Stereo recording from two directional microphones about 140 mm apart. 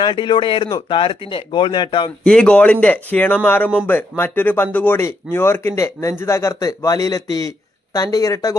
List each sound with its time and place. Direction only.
0.0 s speech: 35° left (ahead or behind)
2.2 s speech: 5° left (ahead or behind); by 8.5 s 25° left (ahead or behind)